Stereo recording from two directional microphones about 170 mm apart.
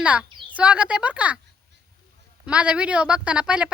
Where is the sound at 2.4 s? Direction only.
5° right (ahead or behind).